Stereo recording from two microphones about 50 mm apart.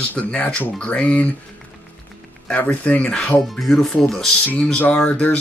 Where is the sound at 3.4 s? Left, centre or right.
Centre.